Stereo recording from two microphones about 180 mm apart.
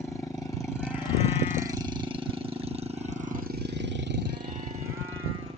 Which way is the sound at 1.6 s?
20° right (ahead or behind).